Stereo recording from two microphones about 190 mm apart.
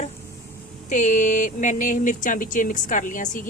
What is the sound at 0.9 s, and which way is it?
Speech, 40° left (ahead or behind).